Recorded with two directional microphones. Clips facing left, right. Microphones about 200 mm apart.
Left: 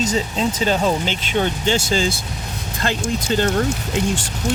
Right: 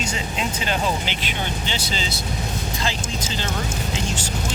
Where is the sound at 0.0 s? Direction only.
40° left (ahead or behind).